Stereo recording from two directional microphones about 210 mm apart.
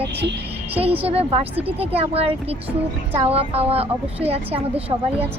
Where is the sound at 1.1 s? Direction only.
30° right (ahead or behind).